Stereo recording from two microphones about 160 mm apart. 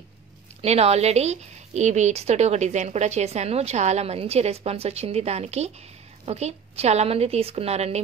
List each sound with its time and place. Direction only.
0.6 s a woman's voice: 40° right (ahead or behind)